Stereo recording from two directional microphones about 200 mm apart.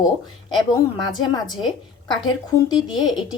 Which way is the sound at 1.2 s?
20° left (ahead or behind).